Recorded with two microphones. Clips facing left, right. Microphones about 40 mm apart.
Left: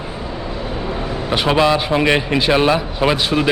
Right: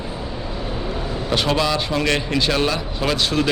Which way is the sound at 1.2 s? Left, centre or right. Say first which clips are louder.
Left 5 dB; left.